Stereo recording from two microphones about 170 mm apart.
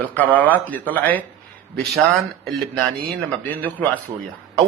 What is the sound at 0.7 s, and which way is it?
Speech, 10° left (ahead or behind).